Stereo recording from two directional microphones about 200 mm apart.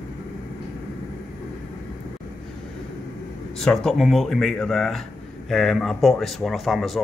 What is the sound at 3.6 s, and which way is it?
Speech, centre (ahead or behind).